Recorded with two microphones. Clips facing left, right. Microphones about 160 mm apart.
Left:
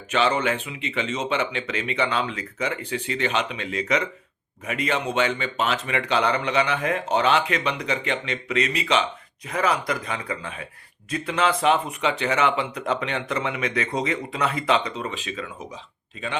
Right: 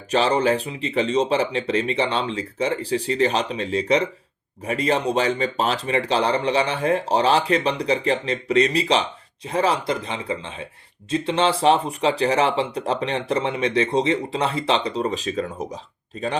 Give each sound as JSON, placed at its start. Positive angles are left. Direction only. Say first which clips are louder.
{"t": 0.1, "sound": "speech", "louder": "right 3 dB", "side_deg": -35}